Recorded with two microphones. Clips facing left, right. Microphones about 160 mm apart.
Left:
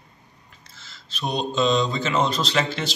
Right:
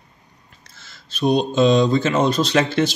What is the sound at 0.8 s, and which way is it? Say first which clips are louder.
Speech: right 8 dB; 50° right (ahead or behind).